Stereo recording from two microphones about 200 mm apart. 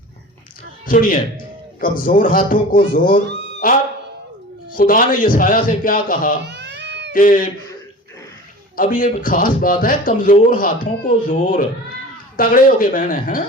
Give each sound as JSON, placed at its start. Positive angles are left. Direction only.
{"t": 0.9, "sound": "speech", "side_deg": 45}
{"t": 6.4, "sound": "a sound", "side_deg": -60}
{"t": 7.1, "sound": "speech", "side_deg": 45}
{"t": 8.7, "sound": "speech", "side_deg": 40}